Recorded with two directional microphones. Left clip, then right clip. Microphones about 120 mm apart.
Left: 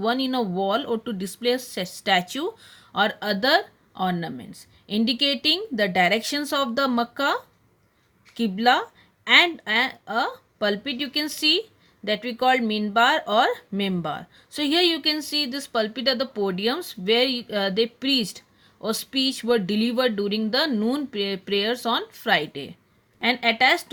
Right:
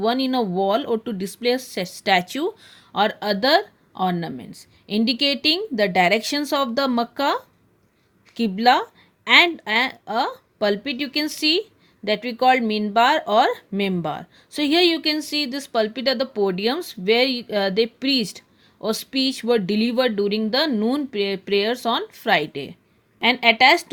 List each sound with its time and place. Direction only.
0.0 s speech: 30° right (ahead or behind)